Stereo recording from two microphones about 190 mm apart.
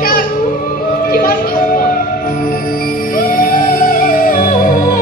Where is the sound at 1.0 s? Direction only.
50° left (ahead or behind).